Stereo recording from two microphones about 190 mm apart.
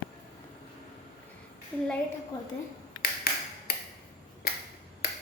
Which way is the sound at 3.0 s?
50° left (ahead or behind).